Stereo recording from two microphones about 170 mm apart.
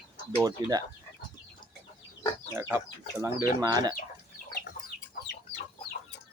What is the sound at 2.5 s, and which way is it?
Speech, 10° right (ahead or behind).